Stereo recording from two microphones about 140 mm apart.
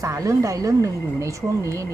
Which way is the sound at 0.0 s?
25° right (ahead or behind).